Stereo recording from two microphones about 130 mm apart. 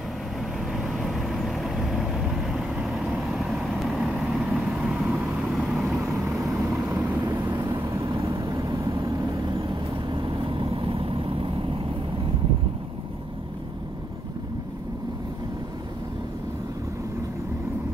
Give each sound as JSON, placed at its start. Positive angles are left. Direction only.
{"t": 0.7, "sound": "vehicle", "side_deg": 0}
{"t": 6.4, "sound": "vehicle", "side_deg": -20}